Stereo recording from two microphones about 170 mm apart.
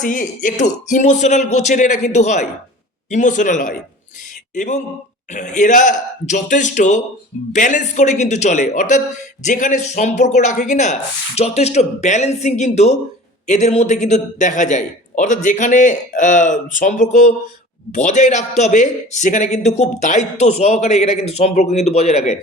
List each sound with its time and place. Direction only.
0.0 s a man's voice: 50° left (ahead or behind)